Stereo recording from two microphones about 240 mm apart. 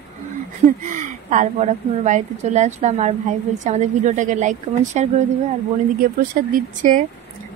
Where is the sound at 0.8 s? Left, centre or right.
Right.